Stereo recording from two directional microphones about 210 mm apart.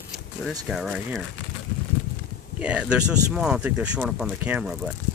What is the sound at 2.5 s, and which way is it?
Speech, 5° right (ahead or behind).